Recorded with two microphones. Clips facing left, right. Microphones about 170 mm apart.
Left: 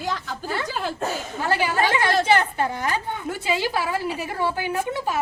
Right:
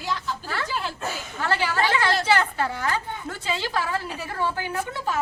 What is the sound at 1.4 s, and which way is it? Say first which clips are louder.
A woman's voice: left 2 dB; 15° left (ahead or behind).